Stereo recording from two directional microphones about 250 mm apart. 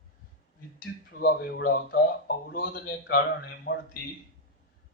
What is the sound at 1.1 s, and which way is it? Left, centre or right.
A man's voice, left.